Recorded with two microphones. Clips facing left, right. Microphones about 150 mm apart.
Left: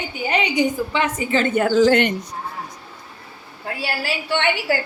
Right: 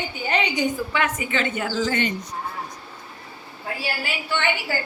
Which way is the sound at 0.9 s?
30° left (ahead or behind).